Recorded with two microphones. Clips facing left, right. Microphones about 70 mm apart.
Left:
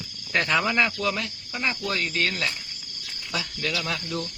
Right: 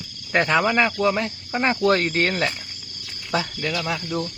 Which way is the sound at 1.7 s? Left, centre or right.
Right.